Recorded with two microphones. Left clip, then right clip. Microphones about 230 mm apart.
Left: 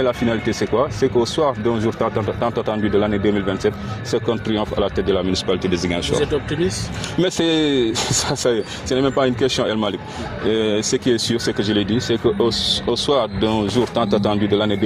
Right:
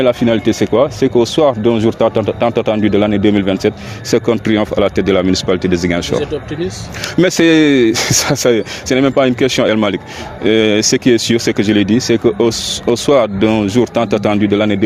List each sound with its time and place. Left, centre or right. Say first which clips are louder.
0.0 s speech: right 7 dB; right
7.2 s speech: right 8 dB; right